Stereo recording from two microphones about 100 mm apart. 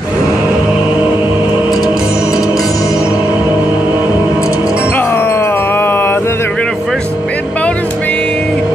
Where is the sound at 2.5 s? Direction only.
35° left (ahead or behind).